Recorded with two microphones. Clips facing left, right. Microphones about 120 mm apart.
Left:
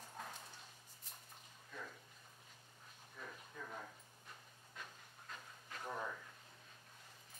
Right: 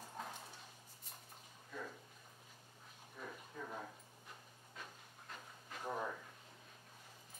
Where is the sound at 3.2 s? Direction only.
15° right (ahead or behind).